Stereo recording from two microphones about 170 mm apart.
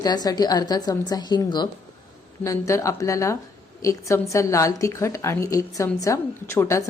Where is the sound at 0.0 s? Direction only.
20° left (ahead or behind).